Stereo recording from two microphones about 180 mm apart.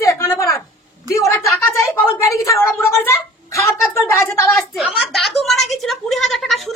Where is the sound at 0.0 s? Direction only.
15° left (ahead or behind).